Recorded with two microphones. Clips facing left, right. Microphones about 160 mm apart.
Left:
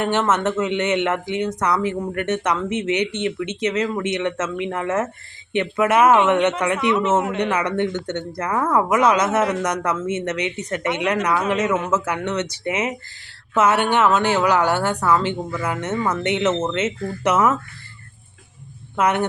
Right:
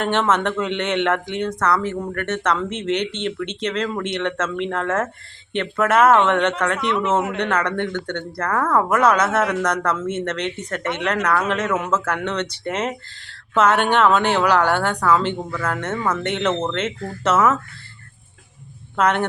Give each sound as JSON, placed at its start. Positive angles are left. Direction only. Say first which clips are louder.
{"t": 0.0, "sound": "speech", "louder": "even", "side_deg": 10}
{"t": 18.9, "sound": "speech", "louder": "even", "side_deg": 10}